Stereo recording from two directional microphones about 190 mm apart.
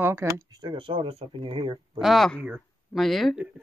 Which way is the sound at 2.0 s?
Centre (ahead or behind).